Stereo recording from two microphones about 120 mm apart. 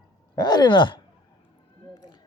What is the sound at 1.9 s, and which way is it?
Emergency vehicle, 35° left (ahead or behind).